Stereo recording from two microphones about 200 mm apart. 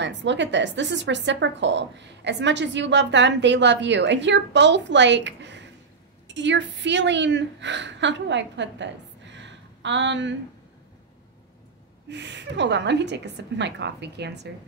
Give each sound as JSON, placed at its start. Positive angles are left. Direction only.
{"t": 0.0, "sound": "a woman's voice", "side_deg": -65}
{"t": 12.1, "sound": "a woman's voice", "side_deg": -60}